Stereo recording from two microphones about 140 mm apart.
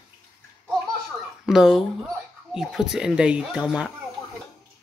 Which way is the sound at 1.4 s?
Centre (ahead or behind).